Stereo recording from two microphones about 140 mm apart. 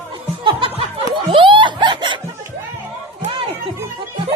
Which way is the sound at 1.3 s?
35° right (ahead or behind).